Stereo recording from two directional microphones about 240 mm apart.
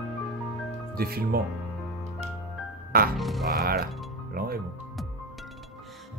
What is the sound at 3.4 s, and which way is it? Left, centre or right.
Speech, right.